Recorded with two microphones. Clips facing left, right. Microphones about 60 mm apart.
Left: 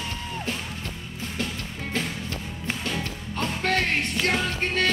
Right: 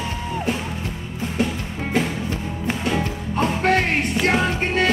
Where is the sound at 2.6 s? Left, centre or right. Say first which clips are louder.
Right 7 dB; centre.